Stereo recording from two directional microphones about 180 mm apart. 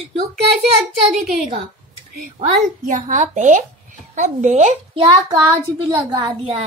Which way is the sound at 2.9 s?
45° right (ahead or behind).